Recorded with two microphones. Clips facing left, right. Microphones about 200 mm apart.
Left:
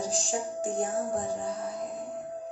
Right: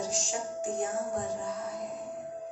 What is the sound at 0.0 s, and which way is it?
Music, 35° left (ahead or behind).